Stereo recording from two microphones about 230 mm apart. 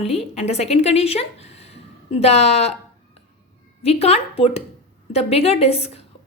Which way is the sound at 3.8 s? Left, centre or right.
Left.